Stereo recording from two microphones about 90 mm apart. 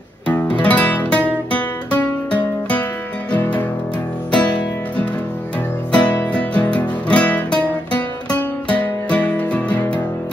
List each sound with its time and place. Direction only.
0.3 s music: 15° left (ahead or behind)